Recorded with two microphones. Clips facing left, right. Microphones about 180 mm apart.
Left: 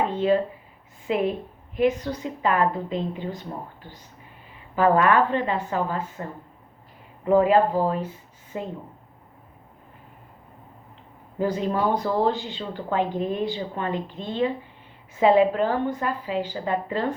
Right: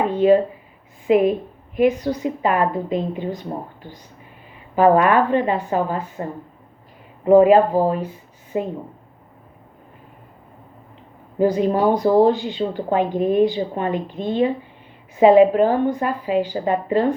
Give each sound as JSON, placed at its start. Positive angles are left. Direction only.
{"t": 0.1, "sound": "a sound", "side_deg": -15}
{"t": 1.0, "sound": "a woman's voice", "side_deg": -15}
{"t": 4.7, "sound": "a woman's voice", "side_deg": -15}
{"t": 7.3, "sound": "a woman's voice", "side_deg": -15}
{"t": 11.3, "sound": "a woman's voice", "side_deg": -15}